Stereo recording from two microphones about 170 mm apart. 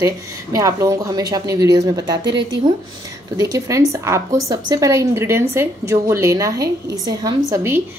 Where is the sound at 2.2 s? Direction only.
90° right.